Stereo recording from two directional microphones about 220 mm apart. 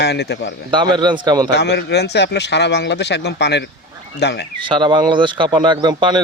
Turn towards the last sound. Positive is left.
turn(degrees=-20)  # may be behind; listen again after turning